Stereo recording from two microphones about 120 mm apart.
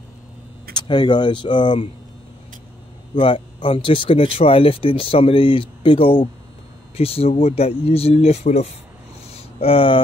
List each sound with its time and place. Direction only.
0.7 s speech: 35° left (ahead or behind)
3.2 s speech: 45° left (ahead or behind); by 8.6 s 65° left (ahead or behind)
9.3 s a sound: 55° left (ahead or behind)